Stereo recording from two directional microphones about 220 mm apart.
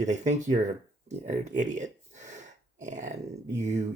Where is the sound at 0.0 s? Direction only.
35° right (ahead or behind).